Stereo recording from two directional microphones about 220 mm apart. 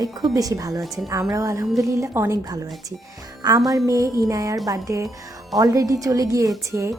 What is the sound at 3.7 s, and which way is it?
A woman's voice, 15° right (ahead or behind).